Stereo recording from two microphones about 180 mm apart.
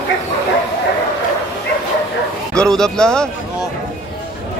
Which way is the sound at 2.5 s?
5° left (ahead or behind).